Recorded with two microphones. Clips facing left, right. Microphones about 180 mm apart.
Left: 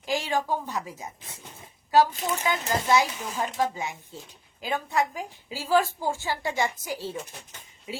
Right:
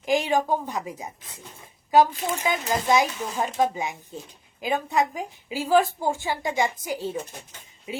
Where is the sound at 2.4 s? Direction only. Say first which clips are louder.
Right 2 dB; 15° right (ahead or behind).